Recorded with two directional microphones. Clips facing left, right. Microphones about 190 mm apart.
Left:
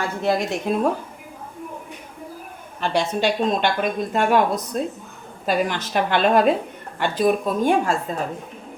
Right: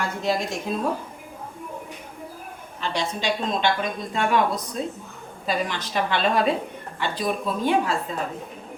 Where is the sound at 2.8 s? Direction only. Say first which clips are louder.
Left 5 dB; 50° left (ahead or behind).